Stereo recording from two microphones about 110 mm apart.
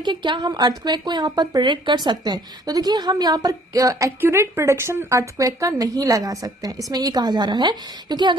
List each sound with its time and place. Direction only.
0.0 s a woman's voice: 45° right (ahead or behind)